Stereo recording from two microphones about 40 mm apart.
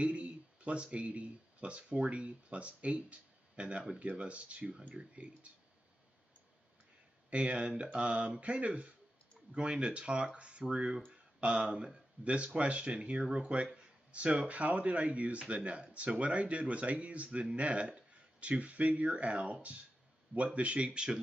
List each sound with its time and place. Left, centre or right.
0.0 s speech: right
7.2 s speech: right